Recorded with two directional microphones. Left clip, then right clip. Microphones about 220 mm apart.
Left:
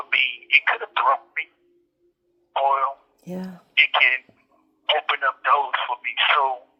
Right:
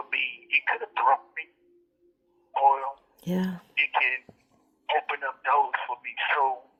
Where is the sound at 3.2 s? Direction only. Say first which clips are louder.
Right 3 dB; 30° right (ahead or behind).